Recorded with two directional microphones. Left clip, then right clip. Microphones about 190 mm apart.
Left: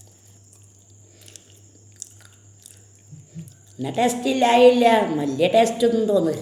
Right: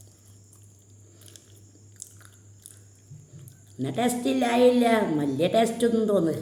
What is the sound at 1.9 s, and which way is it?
Biting, 25° right (ahead or behind).